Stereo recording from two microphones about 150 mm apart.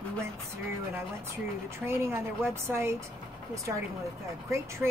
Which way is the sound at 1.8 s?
15° right (ahead or behind).